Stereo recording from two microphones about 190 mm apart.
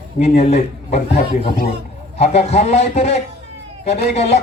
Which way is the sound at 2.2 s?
35° left (ahead or behind).